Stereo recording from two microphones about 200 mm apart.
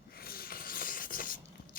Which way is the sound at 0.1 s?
50° left (ahead or behind).